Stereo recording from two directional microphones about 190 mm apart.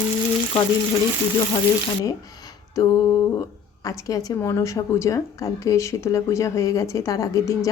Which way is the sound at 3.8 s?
15° left (ahead or behind).